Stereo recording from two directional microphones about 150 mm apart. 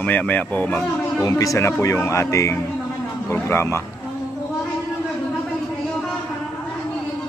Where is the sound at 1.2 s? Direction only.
25° left (ahead or behind).